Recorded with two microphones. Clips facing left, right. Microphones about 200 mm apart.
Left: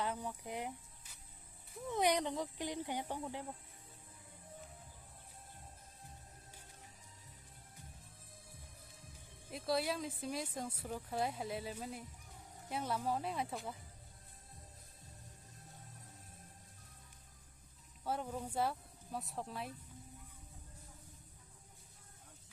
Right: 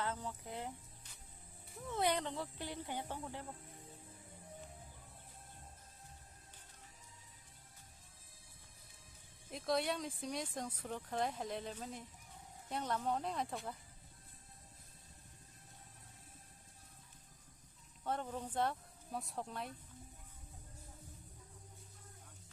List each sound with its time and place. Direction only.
0.0 s speech: 15° left (ahead or behind)
1.9 s speech: 15° left (ahead or behind)
9.5 s speech: 5° left (ahead or behind)
18.0 s speech: 5° left (ahead or behind)